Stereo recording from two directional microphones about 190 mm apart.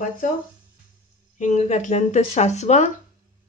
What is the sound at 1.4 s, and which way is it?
Speech, 35° left (ahead or behind).